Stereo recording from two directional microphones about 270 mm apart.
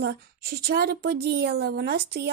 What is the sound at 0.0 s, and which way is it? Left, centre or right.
Speech, right.